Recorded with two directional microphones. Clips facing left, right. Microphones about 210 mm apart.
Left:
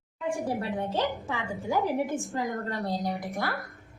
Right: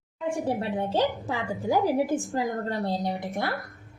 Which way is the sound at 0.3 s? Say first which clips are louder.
Right 2 dB; 25° right (ahead or behind).